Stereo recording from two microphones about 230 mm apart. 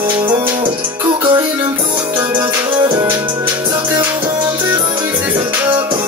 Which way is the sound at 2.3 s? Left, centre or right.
Centre.